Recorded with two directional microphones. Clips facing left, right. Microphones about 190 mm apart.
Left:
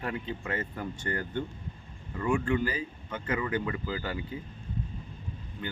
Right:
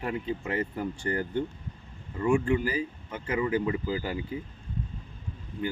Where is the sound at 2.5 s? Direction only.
10° right (ahead or behind).